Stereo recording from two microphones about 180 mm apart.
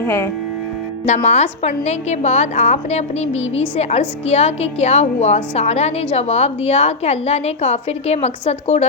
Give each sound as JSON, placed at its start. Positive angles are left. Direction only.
{"t": 0.0, "sound": "speech", "side_deg": 15}
{"t": 1.0, "sound": "a woman's voice", "side_deg": 40}